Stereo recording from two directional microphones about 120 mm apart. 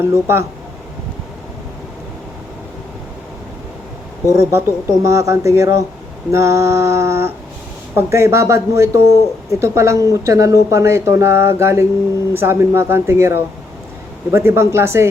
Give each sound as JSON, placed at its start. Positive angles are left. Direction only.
{"t": 0.0, "sound": "speech", "side_deg": -20}
{"t": 4.3, "sound": "speech", "side_deg": -25}